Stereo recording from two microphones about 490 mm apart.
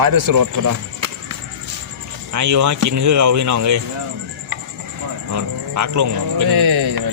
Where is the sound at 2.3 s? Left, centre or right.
Right.